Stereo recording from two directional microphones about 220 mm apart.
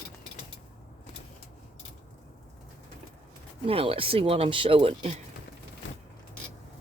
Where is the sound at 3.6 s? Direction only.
25° right (ahead or behind).